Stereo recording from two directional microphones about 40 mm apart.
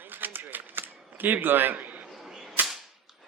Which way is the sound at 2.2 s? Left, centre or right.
Centre.